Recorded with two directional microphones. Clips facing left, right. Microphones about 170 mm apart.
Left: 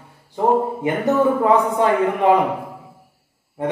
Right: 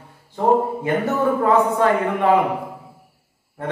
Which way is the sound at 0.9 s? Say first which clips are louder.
Left 3 dB; 20° left (ahead or behind).